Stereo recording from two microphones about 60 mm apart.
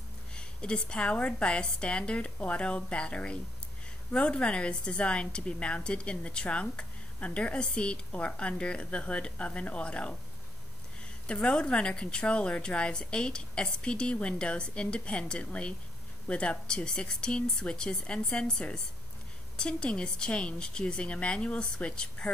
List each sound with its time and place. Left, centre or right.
0.3 s a woman's voice: centre
11.2 s a woman's voice: centre